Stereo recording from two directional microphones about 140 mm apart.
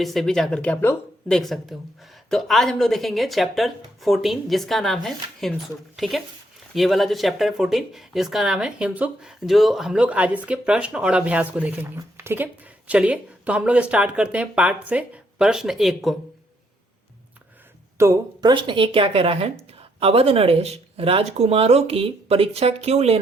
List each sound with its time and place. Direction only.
0.0 s speech: centre (ahead or behind)
1.3 s speech: centre (ahead or behind)
17.9 s a sound: 20° right (ahead or behind)
18.3 s a woman's voice: 35° right (ahead or behind); by 23.2 s 50° right (ahead or behind)